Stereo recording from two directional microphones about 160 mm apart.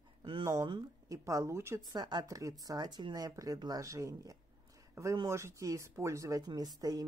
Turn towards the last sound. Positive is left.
turn(degrees=-25)  # may be behind; listen again after turning